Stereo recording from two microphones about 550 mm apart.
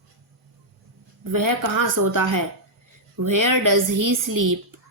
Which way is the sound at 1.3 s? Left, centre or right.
Right.